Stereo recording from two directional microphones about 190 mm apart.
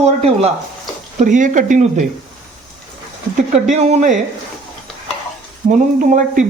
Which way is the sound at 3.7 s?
35° right (ahead or behind).